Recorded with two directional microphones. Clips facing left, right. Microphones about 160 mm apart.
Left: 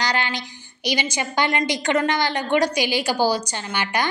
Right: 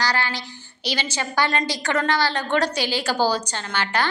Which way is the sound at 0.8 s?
15° left (ahead or behind).